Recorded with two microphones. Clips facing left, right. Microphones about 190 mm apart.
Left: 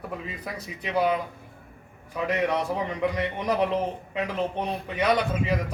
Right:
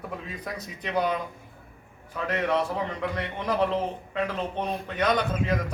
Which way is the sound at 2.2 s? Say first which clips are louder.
Left 1 dB; 15° left (ahead or behind).